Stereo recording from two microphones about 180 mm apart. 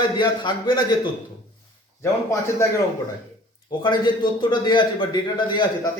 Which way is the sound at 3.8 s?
25° left (ahead or behind).